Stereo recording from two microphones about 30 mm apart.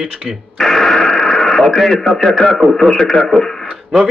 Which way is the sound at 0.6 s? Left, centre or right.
Centre.